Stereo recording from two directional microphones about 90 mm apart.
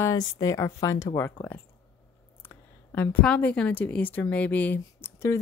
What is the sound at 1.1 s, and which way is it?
A woman's voice, 25° left (ahead or behind).